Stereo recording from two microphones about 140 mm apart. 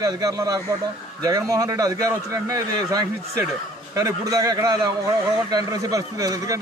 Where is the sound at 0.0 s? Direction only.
25° right (ahead or behind).